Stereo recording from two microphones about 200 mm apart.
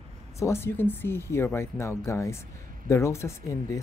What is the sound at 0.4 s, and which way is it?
Speech, 15° left (ahead or behind).